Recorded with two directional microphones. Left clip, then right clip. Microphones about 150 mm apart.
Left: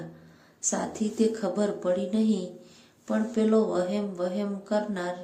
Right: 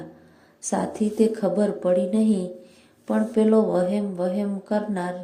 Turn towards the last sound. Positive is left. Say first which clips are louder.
# right 2 dB
turn(degrees=-25)  # may be behind; listen again after turning